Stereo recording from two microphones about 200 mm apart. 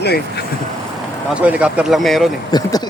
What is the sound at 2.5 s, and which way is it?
Speech, 20° left (ahead or behind).